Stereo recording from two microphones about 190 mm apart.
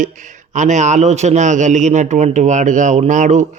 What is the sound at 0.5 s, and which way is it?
A man's voice, 40° right (ahead or behind).